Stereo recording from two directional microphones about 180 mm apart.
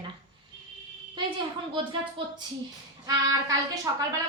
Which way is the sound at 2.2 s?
30° right (ahead or behind).